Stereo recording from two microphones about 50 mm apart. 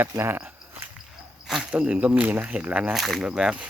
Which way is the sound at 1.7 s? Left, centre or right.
Right.